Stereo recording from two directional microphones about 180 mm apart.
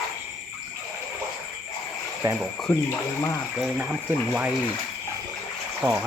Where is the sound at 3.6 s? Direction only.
5° right (ahead or behind).